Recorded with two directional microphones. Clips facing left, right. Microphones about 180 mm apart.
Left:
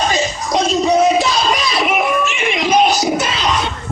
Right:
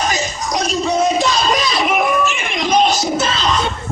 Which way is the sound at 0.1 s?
25° left (ahead or behind).